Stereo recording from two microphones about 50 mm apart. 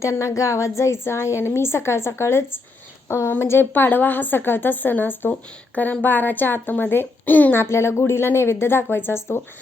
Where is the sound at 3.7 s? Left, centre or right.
Left.